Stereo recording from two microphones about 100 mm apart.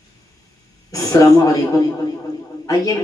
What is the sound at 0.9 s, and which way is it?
Speech, 35° left (ahead or behind).